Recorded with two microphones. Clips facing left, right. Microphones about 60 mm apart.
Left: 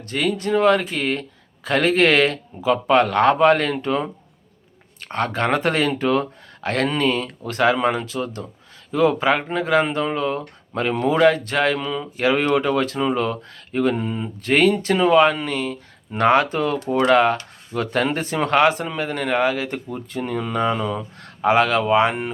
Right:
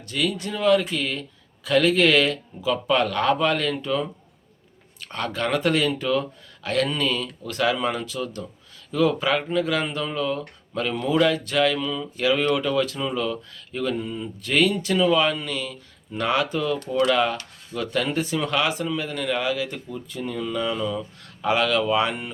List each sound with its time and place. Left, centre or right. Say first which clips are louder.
0.0 s speech: left 4 dB; left